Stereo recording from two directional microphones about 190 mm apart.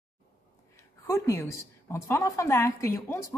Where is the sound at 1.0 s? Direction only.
15° left (ahead or behind).